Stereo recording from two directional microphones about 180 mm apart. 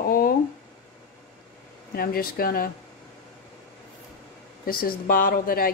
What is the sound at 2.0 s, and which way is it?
Speech, 55° left (ahead or behind).